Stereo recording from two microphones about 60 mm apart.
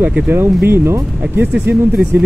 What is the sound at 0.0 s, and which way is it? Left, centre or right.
Speech, right.